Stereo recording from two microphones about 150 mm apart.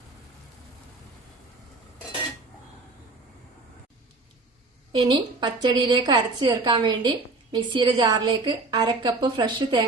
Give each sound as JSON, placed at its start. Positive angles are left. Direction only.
{"t": 4.9, "sound": "a woman's voice", "side_deg": -30}